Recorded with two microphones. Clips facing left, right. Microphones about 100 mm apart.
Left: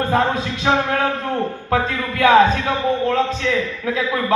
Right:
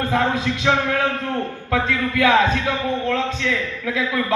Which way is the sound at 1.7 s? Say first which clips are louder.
Right 1 dB; 35° left (ahead or behind).